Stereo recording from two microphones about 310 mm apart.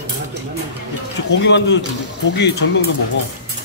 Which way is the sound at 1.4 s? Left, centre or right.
Left.